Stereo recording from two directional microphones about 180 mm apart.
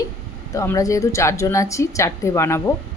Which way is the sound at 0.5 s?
15° left (ahead or behind).